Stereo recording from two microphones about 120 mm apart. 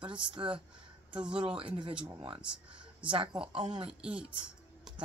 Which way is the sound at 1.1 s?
10° right (ahead or behind).